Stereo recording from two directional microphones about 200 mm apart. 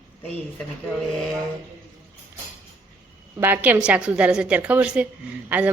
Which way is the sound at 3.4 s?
10° right (ahead or behind).